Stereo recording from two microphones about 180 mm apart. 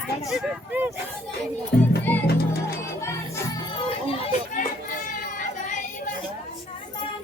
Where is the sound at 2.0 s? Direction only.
10° left (ahead or behind).